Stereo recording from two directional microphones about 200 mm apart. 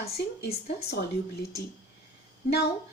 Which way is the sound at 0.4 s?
50° left (ahead or behind).